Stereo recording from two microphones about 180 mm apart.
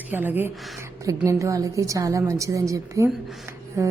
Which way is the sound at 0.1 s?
10° right (ahead or behind).